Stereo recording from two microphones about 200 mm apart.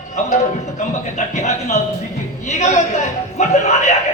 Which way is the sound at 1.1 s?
35° left (ahead or behind).